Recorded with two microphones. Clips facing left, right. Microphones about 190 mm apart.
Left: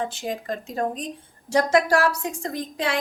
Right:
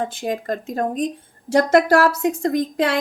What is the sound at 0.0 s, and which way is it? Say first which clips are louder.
A woman's voice: right 4 dB; 50° right (ahead or behind).